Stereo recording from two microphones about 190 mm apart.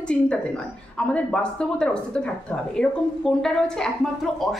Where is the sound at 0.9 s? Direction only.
5° left (ahead or behind).